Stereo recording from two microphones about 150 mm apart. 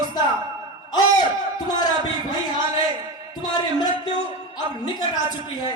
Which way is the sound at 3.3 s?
30° left (ahead or behind).